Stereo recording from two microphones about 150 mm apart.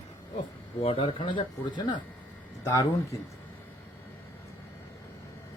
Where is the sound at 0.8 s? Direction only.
40° left (ahead or behind); by 3.2 s 20° left (ahead or behind).